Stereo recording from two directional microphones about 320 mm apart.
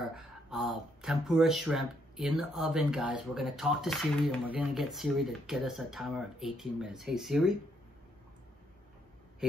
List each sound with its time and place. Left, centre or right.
0.1 s speech: centre